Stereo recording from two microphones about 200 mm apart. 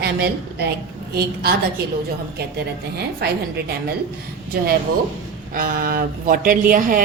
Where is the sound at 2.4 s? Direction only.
55° right (ahead or behind).